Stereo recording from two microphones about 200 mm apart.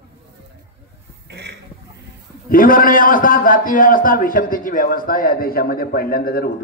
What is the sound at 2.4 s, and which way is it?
A man's voice, 45° left (ahead or behind).